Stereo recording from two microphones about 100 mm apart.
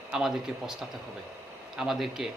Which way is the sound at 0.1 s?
5° right (ahead or behind).